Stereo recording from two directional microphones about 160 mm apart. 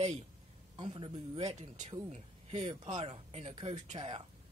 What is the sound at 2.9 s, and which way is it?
Speech, 35° right (ahead or behind).